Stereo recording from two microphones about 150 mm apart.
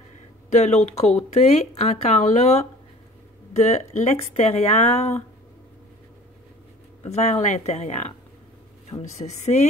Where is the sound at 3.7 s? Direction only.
50° left (ahead or behind).